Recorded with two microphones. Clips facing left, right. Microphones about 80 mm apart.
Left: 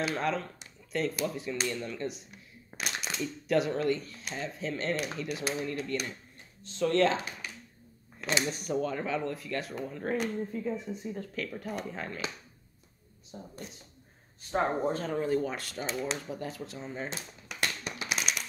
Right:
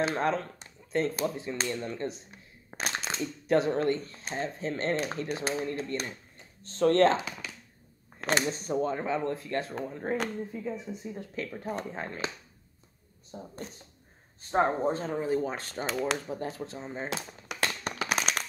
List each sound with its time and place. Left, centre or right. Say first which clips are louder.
0.0 s speech: right 3 dB; right
6.6 s speech: right 4 dB; right
8.2 s speech: right 3 dB; right
8.5 s speech: right 2 dB; right
10.5 s speech: left 2 dB; centre
13.3 s speech: right 3 dB; right
14.5 s speech: right 3 dB; right
15.9 s speech: right 4 dB; right
16.3 s speech: right 3 dB; right
17.9 s a sound: right 4 dB; right